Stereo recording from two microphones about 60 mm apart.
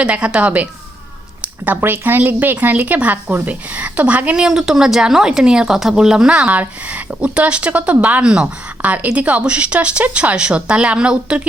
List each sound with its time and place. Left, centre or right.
0.0 s speech: centre
1.6 s speech: right
4.4 s a woman's voice: centre